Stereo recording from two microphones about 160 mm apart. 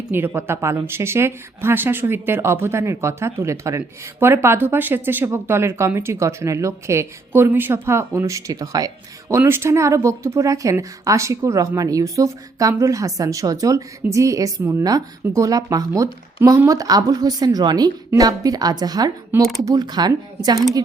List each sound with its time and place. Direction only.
0.1 s speech: 15° right (ahead or behind)